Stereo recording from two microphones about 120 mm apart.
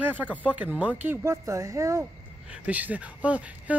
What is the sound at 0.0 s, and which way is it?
Speech, 15° right (ahead or behind).